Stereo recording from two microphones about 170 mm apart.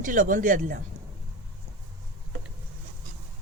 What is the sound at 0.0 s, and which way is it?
Speech, 55° right (ahead or behind).